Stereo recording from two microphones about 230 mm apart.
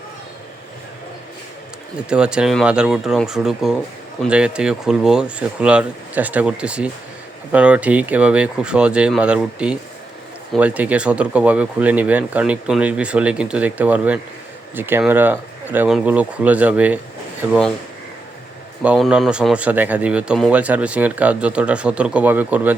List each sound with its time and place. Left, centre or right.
2.0 s speech: centre
18.8 s speech: centre